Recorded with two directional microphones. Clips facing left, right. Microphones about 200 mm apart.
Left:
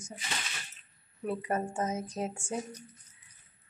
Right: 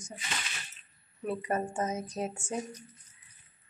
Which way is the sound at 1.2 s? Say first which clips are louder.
Even; 10° left (ahead or behind).